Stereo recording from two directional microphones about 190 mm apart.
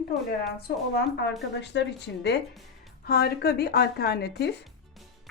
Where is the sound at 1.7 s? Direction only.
70° left (ahead or behind).